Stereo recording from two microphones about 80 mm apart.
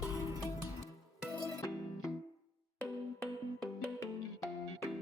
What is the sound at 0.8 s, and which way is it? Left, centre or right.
Music, right.